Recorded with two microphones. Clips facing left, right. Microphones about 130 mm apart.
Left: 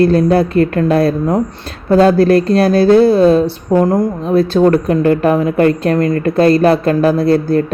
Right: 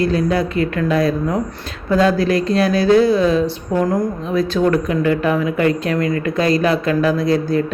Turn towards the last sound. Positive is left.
turn(degrees=55)  # may be behind; listen again after turning